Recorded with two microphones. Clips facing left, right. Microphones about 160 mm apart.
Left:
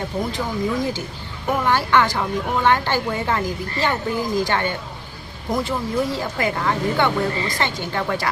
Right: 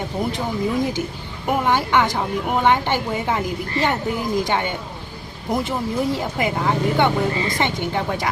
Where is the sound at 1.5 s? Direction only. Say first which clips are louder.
Even; 15° right (ahead or behind).